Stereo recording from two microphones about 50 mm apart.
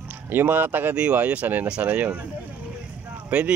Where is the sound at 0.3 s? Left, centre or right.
Right.